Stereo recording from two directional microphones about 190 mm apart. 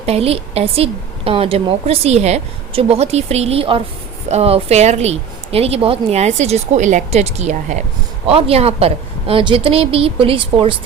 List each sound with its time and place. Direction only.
0.0 s a woman's voice: 35° right (ahead or behind)